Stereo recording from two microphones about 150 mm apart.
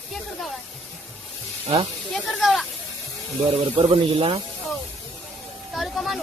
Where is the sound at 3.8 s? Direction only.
35° right (ahead or behind).